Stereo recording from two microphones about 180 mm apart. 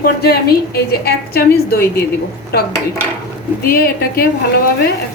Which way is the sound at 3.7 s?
55° left (ahead or behind).